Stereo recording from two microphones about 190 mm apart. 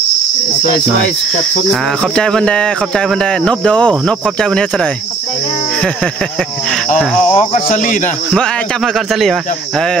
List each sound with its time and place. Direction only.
1.7 s cricket: 5° left (ahead or behind)
7.0 s cricket: centre (ahead or behind)
7.6 s speech: 45° left (ahead or behind)
8.3 s cricket: centre (ahead or behind)